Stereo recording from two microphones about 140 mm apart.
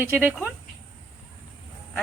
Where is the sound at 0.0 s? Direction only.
10° right (ahead or behind).